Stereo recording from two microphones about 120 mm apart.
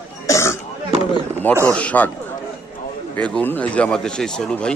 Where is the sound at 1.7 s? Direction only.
10° left (ahead or behind).